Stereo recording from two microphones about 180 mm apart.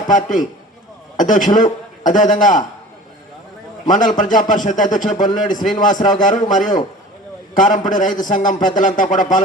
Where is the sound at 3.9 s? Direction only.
45° left (ahead or behind).